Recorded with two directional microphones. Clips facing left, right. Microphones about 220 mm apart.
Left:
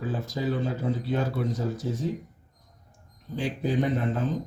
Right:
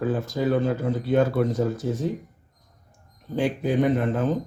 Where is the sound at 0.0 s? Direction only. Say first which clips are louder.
Right 5 dB; 55° right (ahead or behind).